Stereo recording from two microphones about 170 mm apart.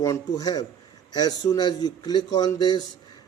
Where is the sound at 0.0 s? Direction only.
20° left (ahead or behind).